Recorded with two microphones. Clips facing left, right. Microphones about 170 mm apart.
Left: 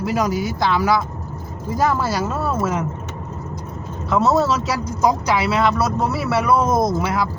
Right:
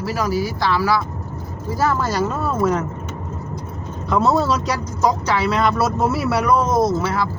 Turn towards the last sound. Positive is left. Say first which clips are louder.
# right 1 dB
turn(degrees=10)  # may be behind; listen again after turning